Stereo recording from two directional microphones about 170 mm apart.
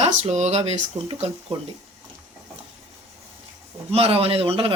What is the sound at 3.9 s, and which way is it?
Speech, 35° right (ahead or behind).